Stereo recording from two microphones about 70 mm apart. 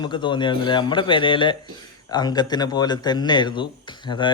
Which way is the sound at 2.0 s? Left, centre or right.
Left.